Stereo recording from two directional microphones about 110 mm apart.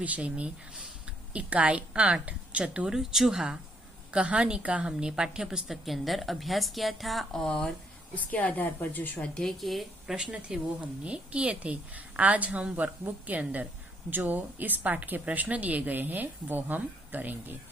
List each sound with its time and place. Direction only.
0.0 s a woman's voice: 10° right (ahead or behind)